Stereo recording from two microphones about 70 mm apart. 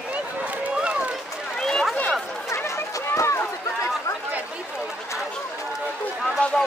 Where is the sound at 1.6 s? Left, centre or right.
Centre.